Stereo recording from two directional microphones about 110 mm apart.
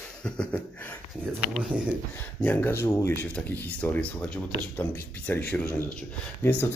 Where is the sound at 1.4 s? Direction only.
10° right (ahead or behind).